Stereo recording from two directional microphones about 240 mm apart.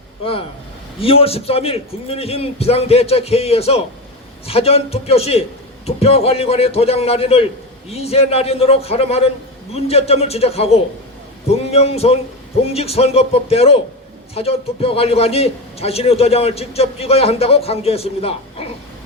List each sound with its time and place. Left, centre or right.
0.9 s a man's voice: left